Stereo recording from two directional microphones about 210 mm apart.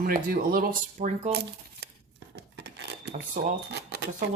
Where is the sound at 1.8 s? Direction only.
55° right (ahead or behind).